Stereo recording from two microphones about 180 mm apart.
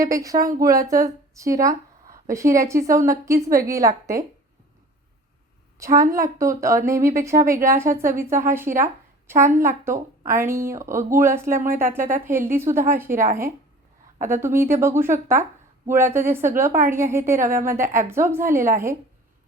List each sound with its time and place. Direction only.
0.0 s speech: 20° right (ahead or behind)
5.8 s a woman's voice: 15° right (ahead or behind)
11.7 s speech: 50° right (ahead or behind)
11.9 s speech: 15° right (ahead or behind)